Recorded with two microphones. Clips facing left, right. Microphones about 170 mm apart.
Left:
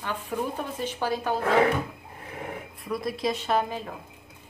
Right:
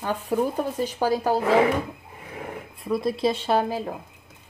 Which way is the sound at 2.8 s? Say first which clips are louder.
Right 5 dB; 25° right (ahead or behind).